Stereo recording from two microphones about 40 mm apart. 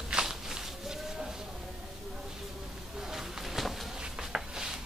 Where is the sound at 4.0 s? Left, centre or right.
Centre.